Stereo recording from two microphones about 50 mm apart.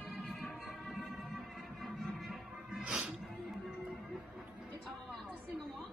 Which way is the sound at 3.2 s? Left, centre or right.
Centre.